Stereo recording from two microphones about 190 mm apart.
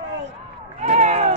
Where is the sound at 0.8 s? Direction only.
35° right (ahead or behind).